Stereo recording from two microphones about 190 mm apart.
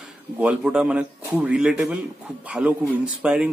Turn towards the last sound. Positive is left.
turn(degrees=-5)  # may be behind; listen again after turning